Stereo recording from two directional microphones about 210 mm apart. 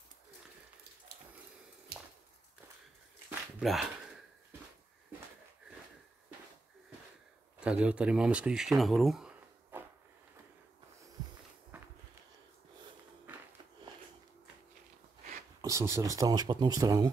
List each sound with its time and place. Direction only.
3.3 s a sound: 5° right (ahead or behind)
7.6 s speech: 5° right (ahead or behind)
11.7 s walk: 5° right (ahead or behind)
15.6 s speech: 15° right (ahead or behind)